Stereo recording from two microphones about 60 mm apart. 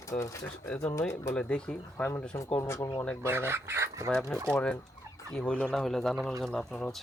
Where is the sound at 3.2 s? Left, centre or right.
Right.